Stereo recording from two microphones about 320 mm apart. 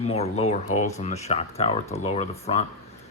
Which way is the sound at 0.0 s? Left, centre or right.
Centre.